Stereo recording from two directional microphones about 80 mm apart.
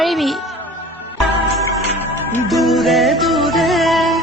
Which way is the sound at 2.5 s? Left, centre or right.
Centre.